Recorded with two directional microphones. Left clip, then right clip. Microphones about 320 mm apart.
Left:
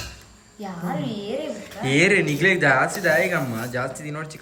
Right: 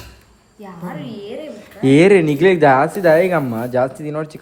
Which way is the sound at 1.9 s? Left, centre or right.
Centre.